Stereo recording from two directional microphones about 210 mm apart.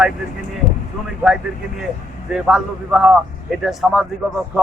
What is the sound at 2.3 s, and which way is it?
Speech, centre (ahead or behind).